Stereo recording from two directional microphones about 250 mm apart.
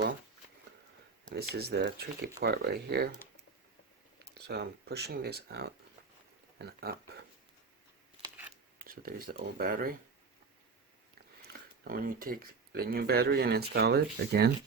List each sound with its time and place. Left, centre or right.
1.3 s speech: right
4.4 s speech: right
8.2 s a sound: centre
8.8 s speech: right
11.4 s speech: right